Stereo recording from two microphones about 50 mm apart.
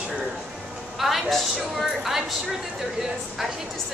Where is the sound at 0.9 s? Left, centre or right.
Centre.